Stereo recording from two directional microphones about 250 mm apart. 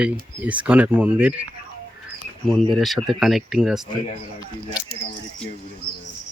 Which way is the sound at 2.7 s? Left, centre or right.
Centre.